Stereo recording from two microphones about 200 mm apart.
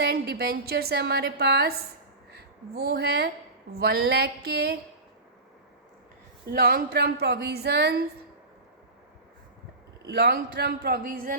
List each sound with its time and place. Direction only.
0.0 s a woman's voice: 50° right (ahead or behind)
6.5 s a woman's voice: 50° right (ahead or behind)
10.1 s a woman's voice: 55° right (ahead or behind)